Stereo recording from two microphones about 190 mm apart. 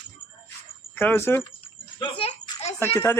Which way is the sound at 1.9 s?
25° left (ahead or behind).